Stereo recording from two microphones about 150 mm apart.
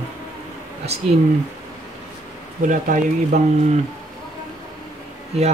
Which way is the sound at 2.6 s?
65° right (ahead or behind).